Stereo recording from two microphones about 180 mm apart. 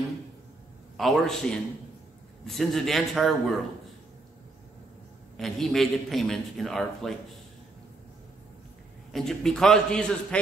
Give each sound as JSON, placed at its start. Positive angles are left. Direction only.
{"t": 0.9, "sound": "a man's voice", "side_deg": 0}
{"t": 5.4, "sound": "a man's voice", "side_deg": 0}
{"t": 9.1, "sound": "a man's voice", "side_deg": 0}